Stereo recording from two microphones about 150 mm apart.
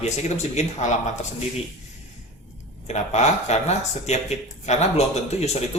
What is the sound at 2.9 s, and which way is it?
Speech, 50° left (ahead or behind).